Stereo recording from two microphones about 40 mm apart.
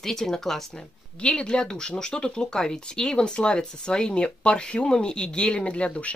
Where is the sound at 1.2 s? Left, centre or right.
Left.